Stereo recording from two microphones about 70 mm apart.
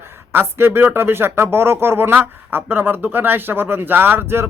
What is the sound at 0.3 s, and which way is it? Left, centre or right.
Speech, right.